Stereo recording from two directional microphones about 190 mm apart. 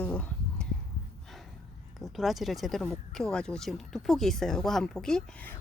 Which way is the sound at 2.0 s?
Centre (ahead or behind).